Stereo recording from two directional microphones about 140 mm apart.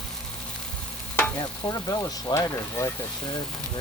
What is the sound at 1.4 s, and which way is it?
Speech, 25° left (ahead or behind).